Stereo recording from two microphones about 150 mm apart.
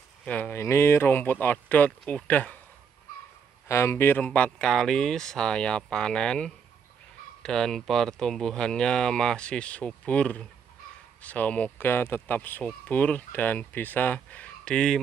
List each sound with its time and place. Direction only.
0.2 s speech: 10° left (ahead or behind)
3.6 s speech: 20° left (ahead or behind)